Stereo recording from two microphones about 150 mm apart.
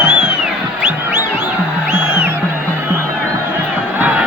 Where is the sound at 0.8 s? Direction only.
15° right (ahead or behind).